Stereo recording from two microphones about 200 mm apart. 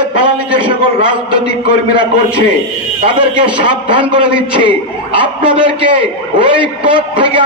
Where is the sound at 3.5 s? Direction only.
25° right (ahead or behind).